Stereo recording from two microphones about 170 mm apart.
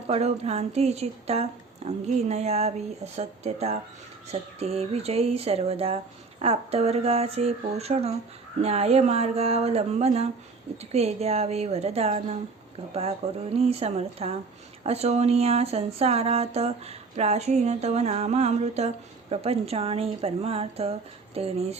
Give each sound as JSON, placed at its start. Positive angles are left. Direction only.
{"t": 0.1, "sound": "speech", "side_deg": -40}